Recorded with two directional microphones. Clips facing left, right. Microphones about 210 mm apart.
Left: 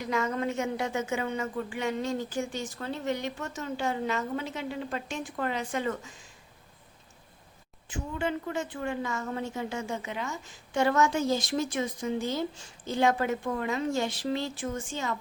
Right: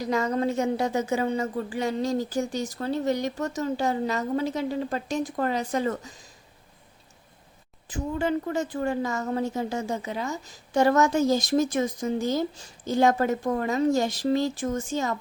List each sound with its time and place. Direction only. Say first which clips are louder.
0.0 s a woman's voice: right 4 dB; 35° right (ahead or behind)
7.9 s a woman's voice: right 5 dB; 35° right (ahead or behind)